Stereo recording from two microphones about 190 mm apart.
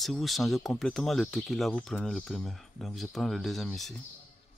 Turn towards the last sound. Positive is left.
turn(degrees=0)  # may be behind; listen again after turning